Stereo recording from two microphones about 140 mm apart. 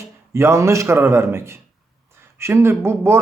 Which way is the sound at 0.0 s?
20° right (ahead or behind).